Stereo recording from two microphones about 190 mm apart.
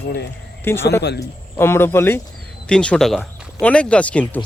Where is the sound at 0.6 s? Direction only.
15° left (ahead or behind).